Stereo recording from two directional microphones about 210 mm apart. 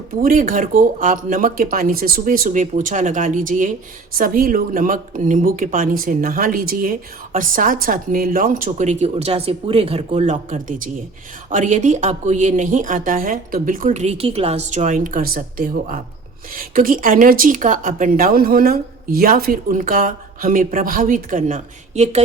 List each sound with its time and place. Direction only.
0.1 s speech: 40° right (ahead or behind)